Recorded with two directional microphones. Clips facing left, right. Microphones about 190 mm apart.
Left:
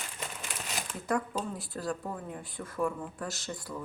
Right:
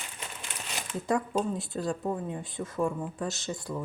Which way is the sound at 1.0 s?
25° right (ahead or behind).